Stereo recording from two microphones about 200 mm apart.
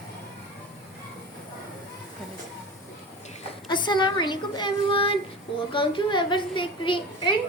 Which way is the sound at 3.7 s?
25° left (ahead or behind).